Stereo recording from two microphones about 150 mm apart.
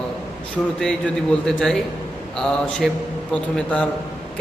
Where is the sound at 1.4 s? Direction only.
5° left (ahead or behind).